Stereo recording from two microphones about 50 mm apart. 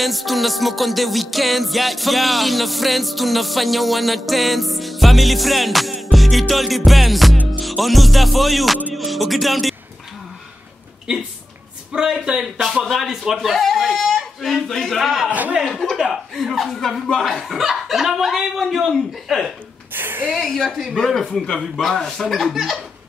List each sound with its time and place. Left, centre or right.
0.0 s music: centre
11.1 s a man's voice: right
12.8 s a man's voice: centre
15.0 s music: centre
15.2 s a man's voice: right
15.6 s music: centre
19.9 s a sound: right
20.3 s music: centre
21.5 s speech: centre
22.2 s music: centre